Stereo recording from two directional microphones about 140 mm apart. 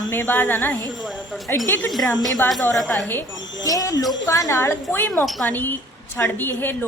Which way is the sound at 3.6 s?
25° left (ahead or behind).